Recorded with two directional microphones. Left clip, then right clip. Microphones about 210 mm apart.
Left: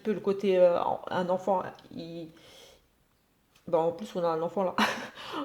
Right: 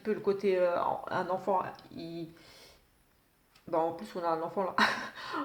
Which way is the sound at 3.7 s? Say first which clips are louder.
Left 4 dB; 35° left (ahead or behind).